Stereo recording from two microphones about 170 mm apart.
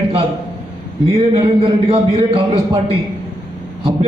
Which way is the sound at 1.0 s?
35° right (ahead or behind).